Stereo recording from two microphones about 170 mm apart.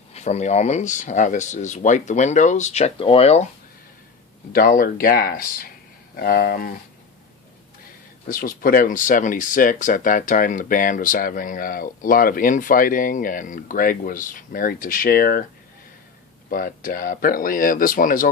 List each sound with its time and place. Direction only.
0.1 s speech: 40° left (ahead or behind)
4.5 s speech: 55° left (ahead or behind)
8.3 s speech: 55° left (ahead or behind)
16.5 s speech: 55° left (ahead or behind)